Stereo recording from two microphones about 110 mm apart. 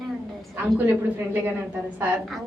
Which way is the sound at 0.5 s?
20° right (ahead or behind).